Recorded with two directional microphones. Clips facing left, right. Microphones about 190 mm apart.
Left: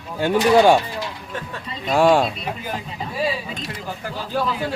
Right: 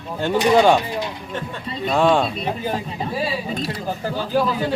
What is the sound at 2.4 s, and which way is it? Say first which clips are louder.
Speech: right 4 dB; 30° right (ahead or behind).